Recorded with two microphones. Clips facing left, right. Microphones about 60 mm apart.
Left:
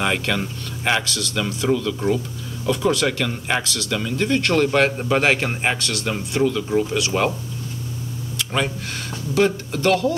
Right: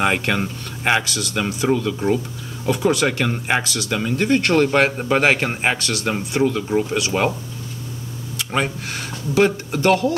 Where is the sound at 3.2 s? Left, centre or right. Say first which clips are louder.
Right 2 dB; right.